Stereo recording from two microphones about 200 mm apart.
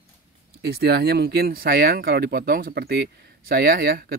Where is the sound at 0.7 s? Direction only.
50° right (ahead or behind).